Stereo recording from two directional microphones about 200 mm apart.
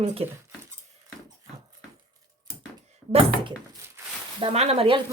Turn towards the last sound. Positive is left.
turn(degrees=-30)  # may be behind; listen again after turning